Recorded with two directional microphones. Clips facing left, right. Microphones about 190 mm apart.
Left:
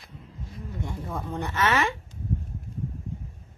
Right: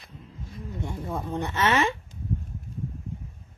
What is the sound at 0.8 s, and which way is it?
Speech, 20° right (ahead or behind).